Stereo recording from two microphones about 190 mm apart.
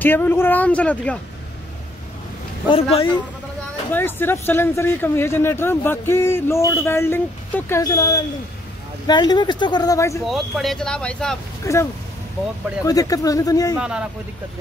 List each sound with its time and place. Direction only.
0.0 s speech: 10° left (ahead or behind)
2.7 s speech: 30° left (ahead or behind)
3.9 s speech: 10° left (ahead or behind)
10.2 s speech: centre (ahead or behind)
11.6 s speech: 15° left (ahead or behind)
13.7 s speech: 5° right (ahead or behind)